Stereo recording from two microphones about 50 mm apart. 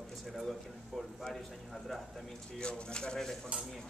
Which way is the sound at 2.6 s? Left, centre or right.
Centre.